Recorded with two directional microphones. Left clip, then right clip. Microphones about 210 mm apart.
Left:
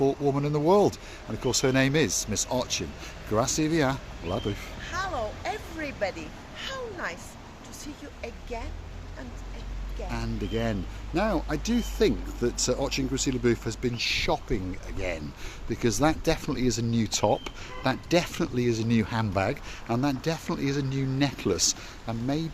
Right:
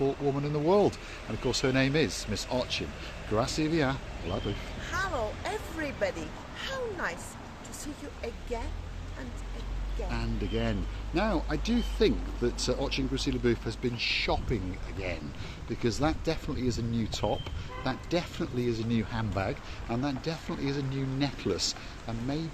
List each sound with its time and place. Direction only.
0.0 s speech: 35° left (ahead or behind)
4.9 s speech: 5° right (ahead or behind)
10.1 s speech: 30° left (ahead or behind)
15.7 s speech: 40° left (ahead or behind)